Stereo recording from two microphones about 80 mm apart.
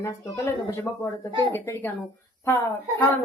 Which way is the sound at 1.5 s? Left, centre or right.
Left.